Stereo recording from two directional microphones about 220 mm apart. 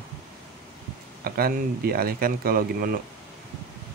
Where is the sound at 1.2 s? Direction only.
45° right (ahead or behind).